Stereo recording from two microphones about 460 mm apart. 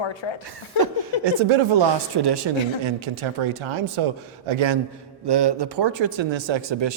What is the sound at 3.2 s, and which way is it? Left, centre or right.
Speech, right.